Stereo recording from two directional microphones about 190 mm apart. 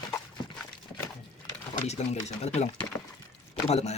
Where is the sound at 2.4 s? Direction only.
35° left (ahead or behind).